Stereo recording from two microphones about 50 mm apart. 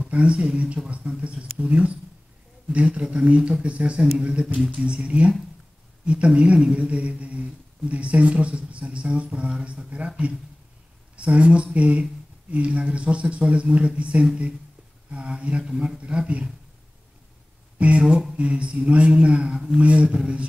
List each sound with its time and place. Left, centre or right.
0.0 s a sound: right
0.8 s speech: right
17.7 s speech: right
19.8 s speech: right